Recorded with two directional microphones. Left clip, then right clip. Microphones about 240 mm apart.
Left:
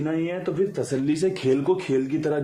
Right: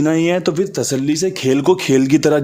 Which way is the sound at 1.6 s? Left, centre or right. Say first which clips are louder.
Right 9 dB; right.